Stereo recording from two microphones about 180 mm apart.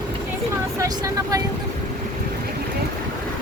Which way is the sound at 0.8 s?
20° right (ahead or behind).